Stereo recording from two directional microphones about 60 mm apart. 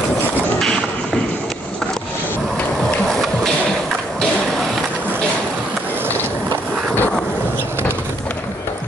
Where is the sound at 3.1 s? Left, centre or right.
Centre.